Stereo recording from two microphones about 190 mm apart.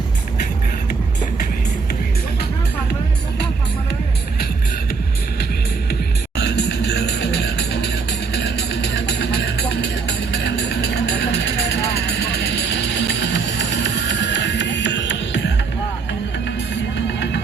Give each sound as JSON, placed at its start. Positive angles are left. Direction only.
{"t": 5.9, "sound": "music", "side_deg": 60}